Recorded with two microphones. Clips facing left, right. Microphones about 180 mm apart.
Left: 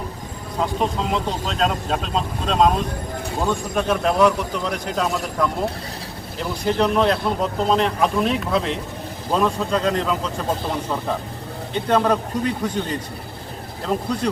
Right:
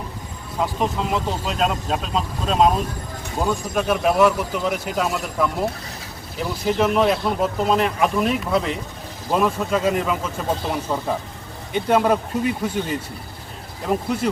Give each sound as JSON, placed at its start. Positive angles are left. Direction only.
{"t": 0.6, "sound": "a man's voice", "side_deg": -5}